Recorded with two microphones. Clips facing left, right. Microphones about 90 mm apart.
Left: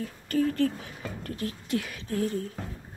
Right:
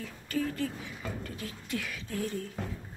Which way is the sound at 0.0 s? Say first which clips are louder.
Left 6 dB; 45° left (ahead or behind).